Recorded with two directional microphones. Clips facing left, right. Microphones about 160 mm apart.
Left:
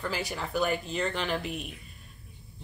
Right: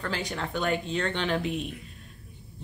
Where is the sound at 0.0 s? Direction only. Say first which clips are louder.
Right 1 dB; 5° left (ahead or behind).